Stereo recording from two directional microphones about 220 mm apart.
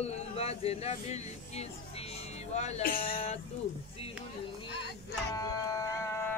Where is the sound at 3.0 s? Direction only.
25° left (ahead or behind).